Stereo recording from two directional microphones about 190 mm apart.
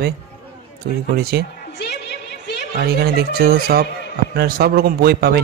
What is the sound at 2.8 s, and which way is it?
A man's voice, 55° right (ahead or behind).